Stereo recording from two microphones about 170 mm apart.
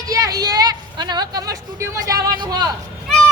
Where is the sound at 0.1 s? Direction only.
20° right (ahead or behind).